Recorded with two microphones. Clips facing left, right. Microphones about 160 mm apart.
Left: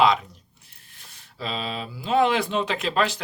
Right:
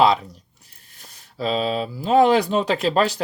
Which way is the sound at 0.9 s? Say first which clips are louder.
Right 7 dB; 40° right (ahead or behind).